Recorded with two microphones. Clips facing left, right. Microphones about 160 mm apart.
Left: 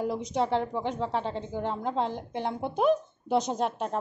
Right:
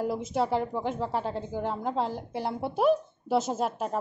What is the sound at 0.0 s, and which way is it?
A woman's voice, 5° right (ahead or behind).